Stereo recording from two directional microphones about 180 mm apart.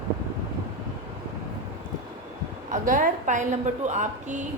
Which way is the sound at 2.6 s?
50° right (ahead or behind).